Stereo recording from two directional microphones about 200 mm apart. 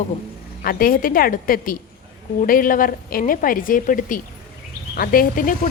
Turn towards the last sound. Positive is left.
turn(degrees=45)  # may be behind; listen again after turning